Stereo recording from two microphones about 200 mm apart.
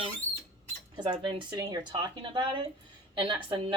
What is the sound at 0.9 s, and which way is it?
A woman's voice, 20° right (ahead or behind).